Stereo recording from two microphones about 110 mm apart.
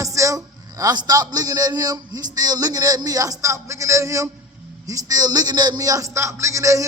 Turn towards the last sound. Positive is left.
turn(degrees=-30)  # may be behind; listen again after turning